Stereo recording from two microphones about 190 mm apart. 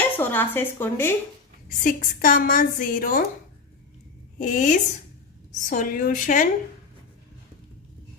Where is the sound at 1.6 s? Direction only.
45° left (ahead or behind).